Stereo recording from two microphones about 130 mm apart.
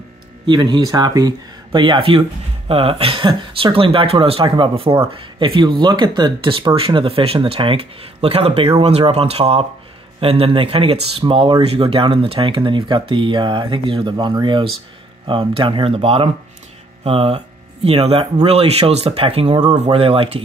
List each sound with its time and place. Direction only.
0.5 s speech: 35° right (ahead or behind)